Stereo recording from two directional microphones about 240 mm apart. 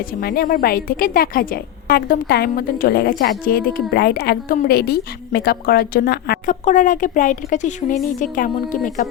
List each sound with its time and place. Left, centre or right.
0.2 s a woman's voice: left